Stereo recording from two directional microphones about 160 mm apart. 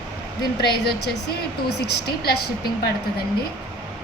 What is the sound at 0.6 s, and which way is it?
A woman's voice, 90° left.